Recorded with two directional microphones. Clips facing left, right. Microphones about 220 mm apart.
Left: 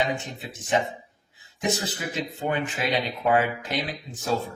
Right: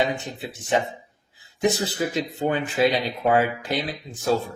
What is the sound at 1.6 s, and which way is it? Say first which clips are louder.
Speech: right 5 dB; 35° right (ahead or behind).